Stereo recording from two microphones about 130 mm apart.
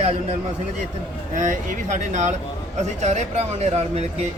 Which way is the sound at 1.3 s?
70° right (ahead or behind).